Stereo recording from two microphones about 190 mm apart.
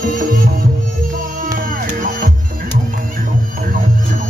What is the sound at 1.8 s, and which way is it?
Music, 45° right (ahead or behind).